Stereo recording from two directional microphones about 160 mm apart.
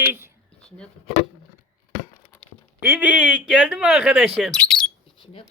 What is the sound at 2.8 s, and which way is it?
Speech, 10° right (ahead or behind).